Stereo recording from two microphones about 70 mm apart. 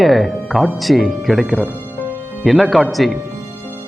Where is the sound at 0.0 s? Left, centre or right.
Centre.